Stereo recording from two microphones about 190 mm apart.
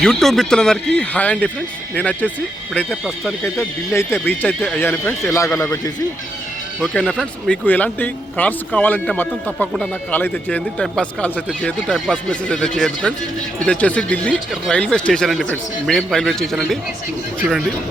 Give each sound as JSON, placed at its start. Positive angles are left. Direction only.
{"t": 0.0, "sound": "speech", "side_deg": 0}
{"t": 3.4, "sound": "speech", "side_deg": 15}
{"t": 6.7, "sound": "speech", "side_deg": 5}